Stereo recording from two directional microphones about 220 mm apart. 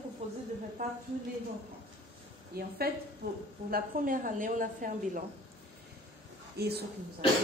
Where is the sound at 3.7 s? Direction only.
40° right (ahead or behind).